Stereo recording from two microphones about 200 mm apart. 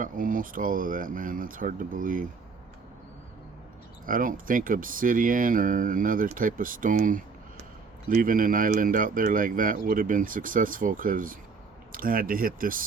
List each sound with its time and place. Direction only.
0.0 s speech: 45° right (ahead or behind)
4.0 s speech: 45° right (ahead or behind)